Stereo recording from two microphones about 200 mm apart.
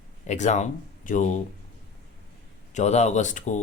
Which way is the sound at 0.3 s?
35° left (ahead or behind).